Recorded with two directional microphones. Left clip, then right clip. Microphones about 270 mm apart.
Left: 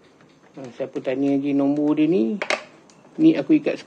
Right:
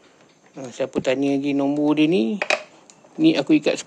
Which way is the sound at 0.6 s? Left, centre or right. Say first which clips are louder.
Right 4 dB; right.